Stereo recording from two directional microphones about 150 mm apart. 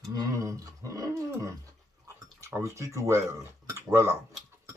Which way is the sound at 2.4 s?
20° right (ahead or behind).